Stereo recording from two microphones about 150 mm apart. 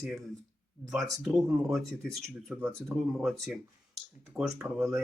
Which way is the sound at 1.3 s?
10° right (ahead or behind).